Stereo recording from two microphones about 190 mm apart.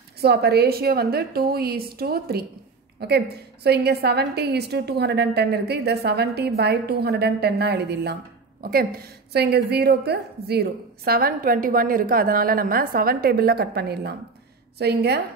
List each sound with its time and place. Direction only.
0.2 s a woman's voice: 60° right (ahead or behind)